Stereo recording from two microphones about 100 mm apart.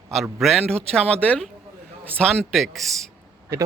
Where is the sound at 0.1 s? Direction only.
Centre (ahead or behind).